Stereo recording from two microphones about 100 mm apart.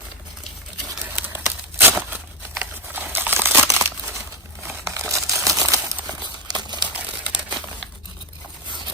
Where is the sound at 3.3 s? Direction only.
25° right (ahead or behind).